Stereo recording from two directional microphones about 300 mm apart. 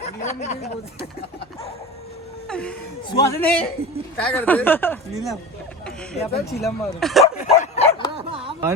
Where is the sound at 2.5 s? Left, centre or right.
Centre.